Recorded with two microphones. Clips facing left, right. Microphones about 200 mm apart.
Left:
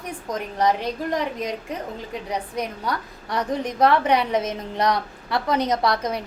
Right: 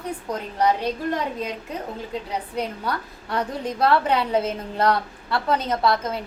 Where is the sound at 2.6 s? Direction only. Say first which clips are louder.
Right 3 dB; 15° left (ahead or behind).